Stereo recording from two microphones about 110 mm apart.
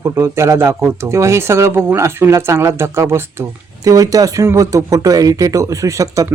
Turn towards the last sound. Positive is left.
turn(degrees=-30)  # may be behind; listen again after turning